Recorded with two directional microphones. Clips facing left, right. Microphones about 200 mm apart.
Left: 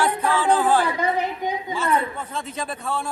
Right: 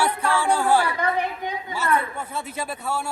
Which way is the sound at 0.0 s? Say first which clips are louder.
Left 1 dB; 10° right (ahead or behind).